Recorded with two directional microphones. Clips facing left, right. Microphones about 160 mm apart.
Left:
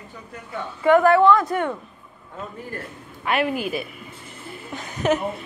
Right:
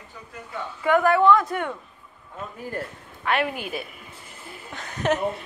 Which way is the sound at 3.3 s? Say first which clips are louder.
Left 3 dB; 5° left (ahead or behind).